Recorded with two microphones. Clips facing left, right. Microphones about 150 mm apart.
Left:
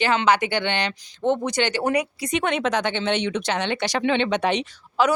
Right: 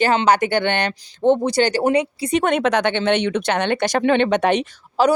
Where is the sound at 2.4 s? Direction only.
55° right (ahead or behind).